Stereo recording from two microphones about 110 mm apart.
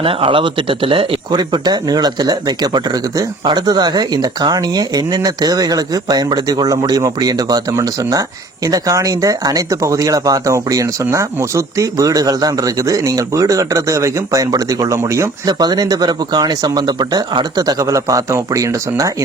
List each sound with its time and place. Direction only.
0.0 s speech: 55° right (ahead or behind)
1.3 s speech: 40° right (ahead or behind)